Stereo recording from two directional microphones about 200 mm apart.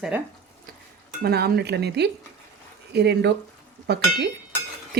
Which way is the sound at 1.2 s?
50° right (ahead or behind).